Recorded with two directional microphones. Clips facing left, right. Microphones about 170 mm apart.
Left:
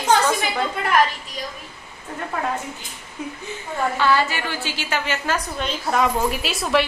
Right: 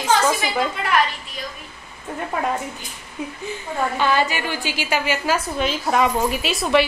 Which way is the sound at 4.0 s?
20° right (ahead or behind).